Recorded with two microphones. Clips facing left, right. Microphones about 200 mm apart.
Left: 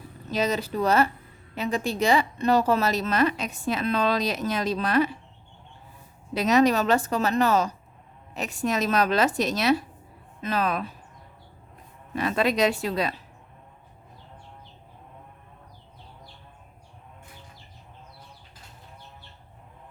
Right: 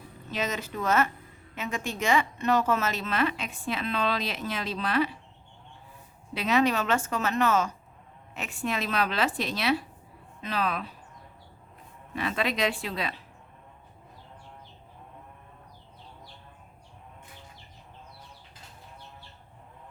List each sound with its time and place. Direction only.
0.3 s a woman's voice: 35° left (ahead or behind)
6.3 s a woman's voice: 40° left (ahead or behind)
12.1 s a woman's voice: 40° left (ahead or behind)